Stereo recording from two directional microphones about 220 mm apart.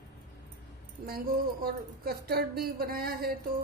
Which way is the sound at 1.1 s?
45° right (ahead or behind).